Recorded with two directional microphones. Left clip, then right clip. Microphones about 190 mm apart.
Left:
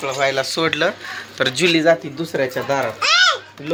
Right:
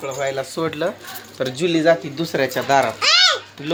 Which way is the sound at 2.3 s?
30° right (ahead or behind).